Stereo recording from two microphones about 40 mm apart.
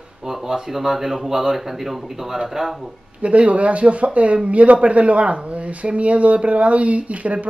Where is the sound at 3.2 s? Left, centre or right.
Right.